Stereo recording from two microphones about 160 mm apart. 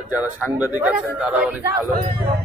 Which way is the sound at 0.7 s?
10° right (ahead or behind).